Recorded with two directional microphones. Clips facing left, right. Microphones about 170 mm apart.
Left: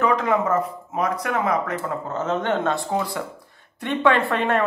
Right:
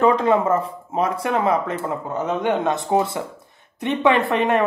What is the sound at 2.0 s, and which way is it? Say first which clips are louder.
Speech: right 2 dB; 15° right (ahead or behind).